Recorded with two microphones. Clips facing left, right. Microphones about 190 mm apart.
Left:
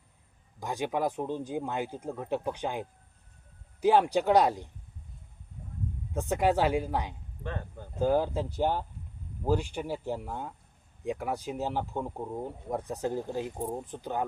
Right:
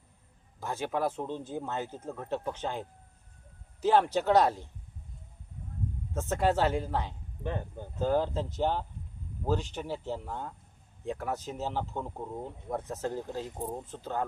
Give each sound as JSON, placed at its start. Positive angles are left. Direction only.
{"t": 0.6, "sound": "speech", "side_deg": 15}
{"t": 6.1, "sound": "speech", "side_deg": 15}
{"t": 7.4, "sound": "speech", "side_deg": -20}
{"t": 7.9, "sound": "speech", "side_deg": 10}